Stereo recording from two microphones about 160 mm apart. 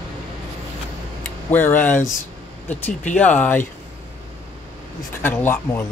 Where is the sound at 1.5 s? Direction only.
10° left (ahead or behind).